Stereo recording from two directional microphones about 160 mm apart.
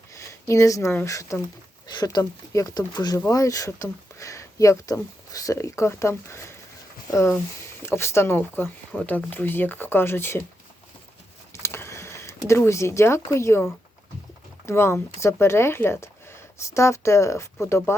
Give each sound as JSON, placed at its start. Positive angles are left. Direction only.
{"t": 0.1, "sound": "speech", "side_deg": 20}
{"t": 11.5, "sound": "a sound", "side_deg": 15}
{"t": 14.7, "sound": "speech", "side_deg": 15}